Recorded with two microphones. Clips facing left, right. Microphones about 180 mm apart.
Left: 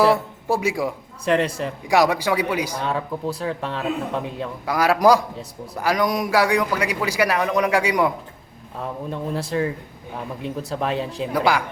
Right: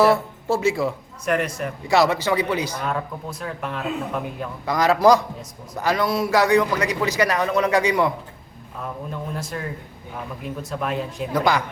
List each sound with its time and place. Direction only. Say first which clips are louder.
0.0 s speech: even; 10° left (ahead or behind)
1.2 s a man's voice: left 3 dB; 30° left (ahead or behind)
1.9 s a man's voice: even; 15° left (ahead or behind)
2.8 s a man's voice: left 3 dB; 30° left (ahead or behind)
4.6 s a man's voice: even; 10° left (ahead or behind)
9.0 s a man's voice: left 4 dB; 30° left (ahead or behind)
11.3 s a man's voice: even; 10° left (ahead or behind)